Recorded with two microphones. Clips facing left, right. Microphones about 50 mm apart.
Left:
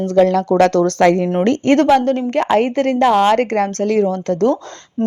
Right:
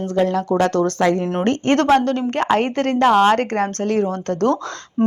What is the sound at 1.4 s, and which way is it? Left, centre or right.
Speech, right.